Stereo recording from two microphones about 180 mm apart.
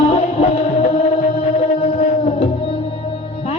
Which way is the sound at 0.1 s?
35° left (ahead or behind).